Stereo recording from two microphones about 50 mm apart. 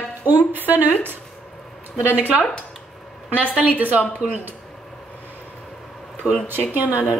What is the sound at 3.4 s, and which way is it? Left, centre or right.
A woman's voice, right.